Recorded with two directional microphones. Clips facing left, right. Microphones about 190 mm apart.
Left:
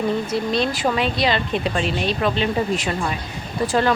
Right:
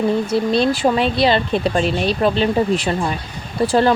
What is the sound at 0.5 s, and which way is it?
Speech, 30° right (ahead or behind).